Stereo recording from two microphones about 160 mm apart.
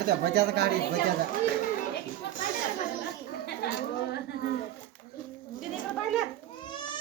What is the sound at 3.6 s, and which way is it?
Speech, 90° left.